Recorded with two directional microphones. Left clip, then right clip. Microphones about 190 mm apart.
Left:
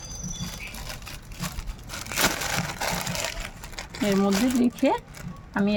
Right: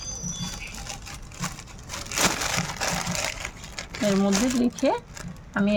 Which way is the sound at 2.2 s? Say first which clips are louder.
Right 1 dB; 10° right (ahead or behind).